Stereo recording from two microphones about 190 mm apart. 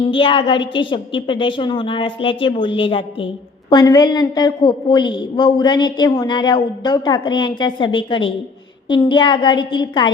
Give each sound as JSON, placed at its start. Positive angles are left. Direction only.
{"t": 0.0, "sound": "a woman's voice", "side_deg": 25}